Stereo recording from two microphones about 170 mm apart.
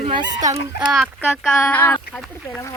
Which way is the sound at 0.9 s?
Centre (ahead or behind).